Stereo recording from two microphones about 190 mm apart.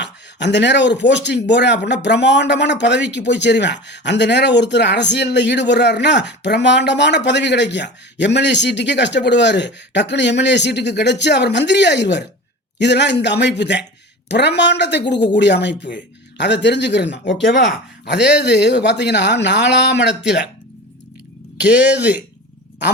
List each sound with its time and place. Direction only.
0.0 s speech: 65° left (ahead or behind)
21.6 s speech: 5° right (ahead or behind)